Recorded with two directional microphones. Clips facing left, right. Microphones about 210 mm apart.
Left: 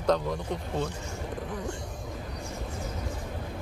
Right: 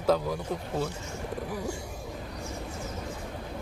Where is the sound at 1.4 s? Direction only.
10° right (ahead or behind).